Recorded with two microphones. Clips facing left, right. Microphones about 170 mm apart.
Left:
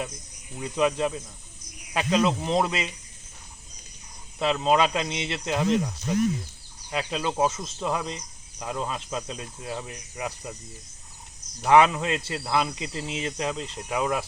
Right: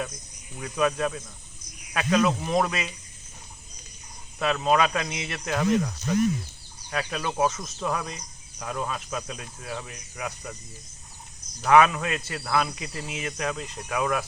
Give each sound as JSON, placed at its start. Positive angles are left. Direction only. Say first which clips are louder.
{"t": 0.6, "sound": "speech", "louder": "left 1 dB", "side_deg": 25}
{"t": 4.5, "sound": "speech", "louder": "left 1 dB", "side_deg": 20}
{"t": 6.9, "sound": "speech", "louder": "left 1 dB", "side_deg": 20}
{"t": 11.6, "sound": "speech", "louder": "even", "side_deg": 25}